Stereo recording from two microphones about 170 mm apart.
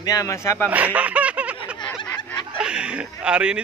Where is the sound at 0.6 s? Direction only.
10° right (ahead or behind).